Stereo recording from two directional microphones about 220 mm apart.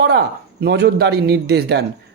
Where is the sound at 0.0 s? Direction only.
50° right (ahead or behind).